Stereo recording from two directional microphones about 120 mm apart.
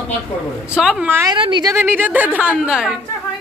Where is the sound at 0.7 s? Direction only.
5° right (ahead or behind).